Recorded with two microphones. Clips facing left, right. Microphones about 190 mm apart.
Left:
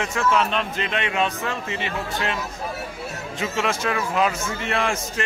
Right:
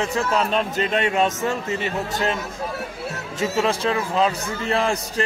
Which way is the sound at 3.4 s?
35° right (ahead or behind).